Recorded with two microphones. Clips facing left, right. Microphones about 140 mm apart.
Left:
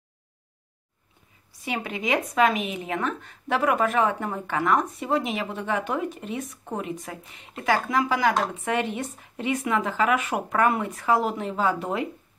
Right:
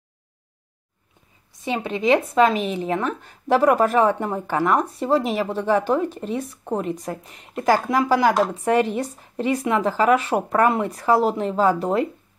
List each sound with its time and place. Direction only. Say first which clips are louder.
1.6 s a woman's voice: right 6 dB; 25° right (ahead or behind)